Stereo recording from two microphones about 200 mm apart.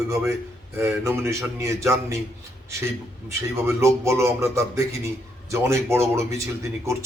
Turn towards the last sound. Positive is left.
turn(degrees=-15)  # may be behind; listen again after turning